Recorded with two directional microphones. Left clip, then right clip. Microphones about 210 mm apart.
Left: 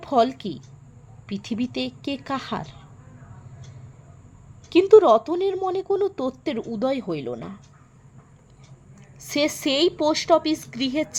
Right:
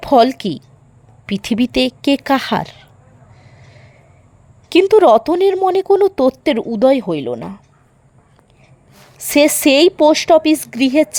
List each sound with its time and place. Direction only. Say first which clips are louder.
0.0 s a woman's voice: right 9 dB; 45° right (ahead or behind)
4.7 s speech: right 5 dB; 45° right (ahead or behind)
9.1 s a woman's voice: right 11 dB; 45° right (ahead or behind)